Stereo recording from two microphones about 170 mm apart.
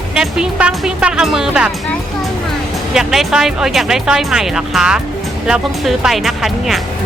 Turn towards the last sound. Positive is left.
turn(degrees=0)  # may be behind; listen again after turning